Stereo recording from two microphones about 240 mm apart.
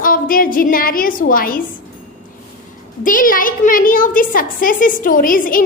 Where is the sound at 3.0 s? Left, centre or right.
Left.